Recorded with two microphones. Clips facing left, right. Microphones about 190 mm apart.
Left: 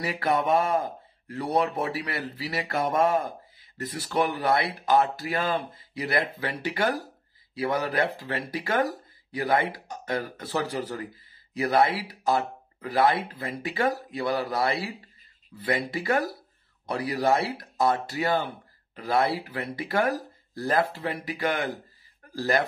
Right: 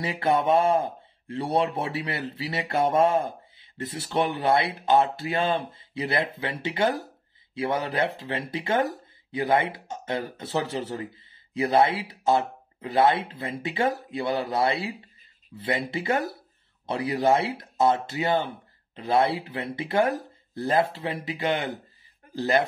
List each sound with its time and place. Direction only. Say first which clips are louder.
0.0 s speech: right 2 dB; 25° right (ahead or behind)